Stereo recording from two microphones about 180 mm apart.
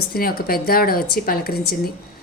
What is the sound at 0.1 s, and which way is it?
A woman's voice, 55° left (ahead or behind).